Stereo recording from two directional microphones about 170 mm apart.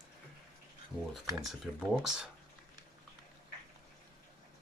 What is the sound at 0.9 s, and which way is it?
Speech, centre (ahead or behind).